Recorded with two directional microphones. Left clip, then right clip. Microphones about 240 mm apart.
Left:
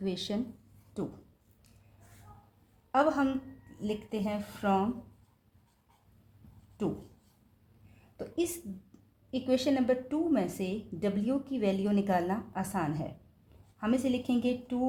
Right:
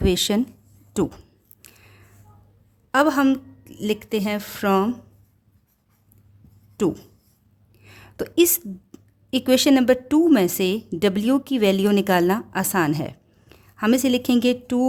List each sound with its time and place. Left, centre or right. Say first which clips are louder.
0.0 s speech: right 14 dB; right
1.6 s a sound: right 17 dB; right
2.9 s a woman's voice: right 9 dB; right
6.8 s a woman's voice: right 12 dB; right
8.1 s a woman's voice: right 15 dB; right